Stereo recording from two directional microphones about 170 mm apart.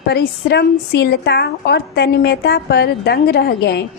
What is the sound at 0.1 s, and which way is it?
A woman's voice, 75° left (ahead or behind).